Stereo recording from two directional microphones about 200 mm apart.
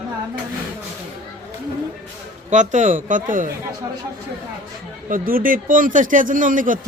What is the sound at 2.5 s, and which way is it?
A man's voice, 40° right (ahead or behind).